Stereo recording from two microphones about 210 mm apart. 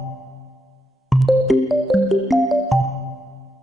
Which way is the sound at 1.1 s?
Centre (ahead or behind).